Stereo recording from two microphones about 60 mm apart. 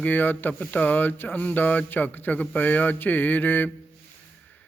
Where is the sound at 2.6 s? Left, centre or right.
Left.